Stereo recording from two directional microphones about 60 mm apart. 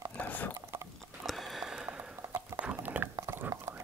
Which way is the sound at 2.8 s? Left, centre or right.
Right.